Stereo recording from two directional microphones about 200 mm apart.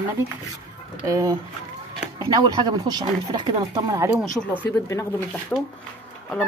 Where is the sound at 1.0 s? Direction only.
15° right (ahead or behind).